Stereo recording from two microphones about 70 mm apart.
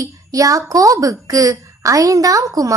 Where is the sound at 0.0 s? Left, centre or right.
Right.